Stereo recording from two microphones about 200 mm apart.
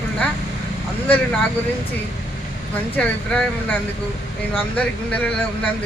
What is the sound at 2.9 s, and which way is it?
Speech, 5° left (ahead or behind).